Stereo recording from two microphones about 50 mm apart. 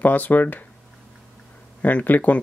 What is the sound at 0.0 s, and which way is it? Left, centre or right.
Speech, left.